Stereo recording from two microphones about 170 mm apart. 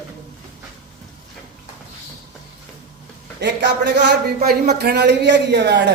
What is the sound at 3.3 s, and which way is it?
Speech, 90° right.